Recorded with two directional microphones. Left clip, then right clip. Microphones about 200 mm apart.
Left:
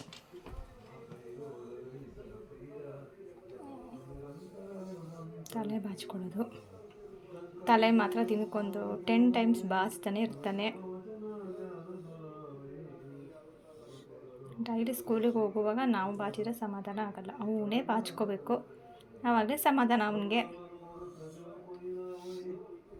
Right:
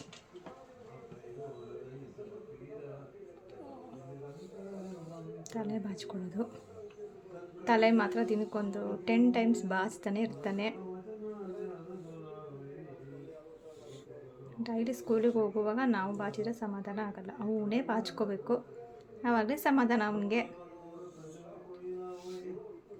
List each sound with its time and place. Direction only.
5.5 s speech: 10° right (ahead or behind)
7.6 s a woman's voice: 10° right (ahead or behind)
14.6 s a woman's voice: 10° right (ahead or behind)